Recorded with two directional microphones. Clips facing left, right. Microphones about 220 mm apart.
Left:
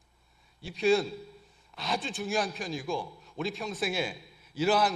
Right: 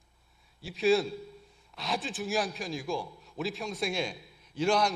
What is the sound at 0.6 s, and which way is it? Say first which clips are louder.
A man's voice: even; centre (ahead or behind).